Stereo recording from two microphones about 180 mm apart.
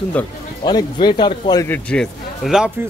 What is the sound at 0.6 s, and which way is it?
Speech, 25° left (ahead or behind).